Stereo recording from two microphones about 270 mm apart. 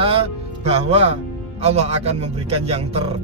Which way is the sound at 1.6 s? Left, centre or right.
Right.